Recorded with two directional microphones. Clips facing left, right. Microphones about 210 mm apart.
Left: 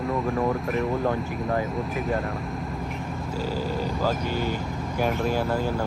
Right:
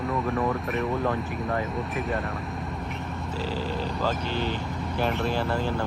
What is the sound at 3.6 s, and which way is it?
Speech, 45° left (ahead or behind).